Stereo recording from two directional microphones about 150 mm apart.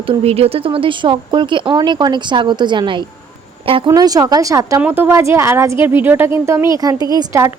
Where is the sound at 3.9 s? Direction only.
25° right (ahead or behind).